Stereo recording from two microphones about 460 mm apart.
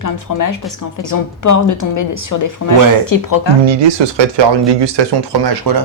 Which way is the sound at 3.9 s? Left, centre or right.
Right.